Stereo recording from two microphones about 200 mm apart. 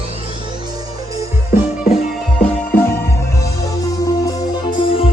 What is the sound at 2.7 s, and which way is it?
Music, 10° left (ahead or behind).